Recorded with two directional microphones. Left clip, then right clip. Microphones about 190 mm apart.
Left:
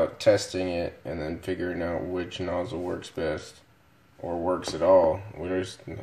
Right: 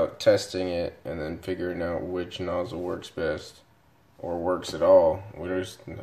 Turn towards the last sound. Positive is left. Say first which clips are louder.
# left 1 dB
turn(degrees=0)  # may be behind; listen again after turning